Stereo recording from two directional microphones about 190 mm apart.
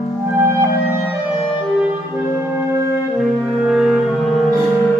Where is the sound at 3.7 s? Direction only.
5° right (ahead or behind).